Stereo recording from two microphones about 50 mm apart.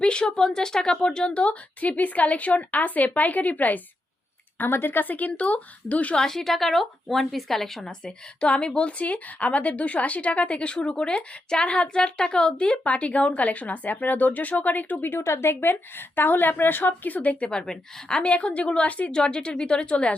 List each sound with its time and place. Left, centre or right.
0.0 s a woman's voice: centre; by 3.8 s left
4.5 s a woman's voice: left
6.1 s a woman's voice: centre
7.9 s speech: centre; by 15.2 s left
15.2 s a woman's voice: left
17.5 s speech: centre
19.1 s speech: centre